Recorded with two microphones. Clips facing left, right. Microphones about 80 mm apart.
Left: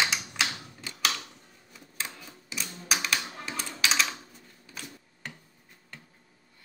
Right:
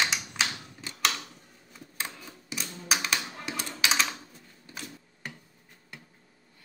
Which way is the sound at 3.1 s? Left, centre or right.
Centre.